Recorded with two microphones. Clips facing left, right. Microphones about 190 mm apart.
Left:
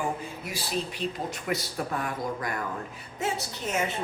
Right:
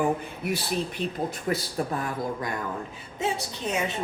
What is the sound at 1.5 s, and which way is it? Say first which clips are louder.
Speech: right 2 dB; 35° right (ahead or behind).